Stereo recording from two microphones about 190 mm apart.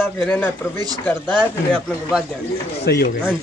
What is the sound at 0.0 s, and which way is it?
Speech, 10° left (ahead or behind).